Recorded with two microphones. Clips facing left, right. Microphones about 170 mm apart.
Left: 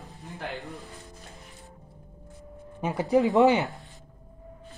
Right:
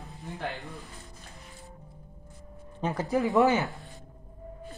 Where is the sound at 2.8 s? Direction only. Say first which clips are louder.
Left 4 dB; 15° left (ahead or behind).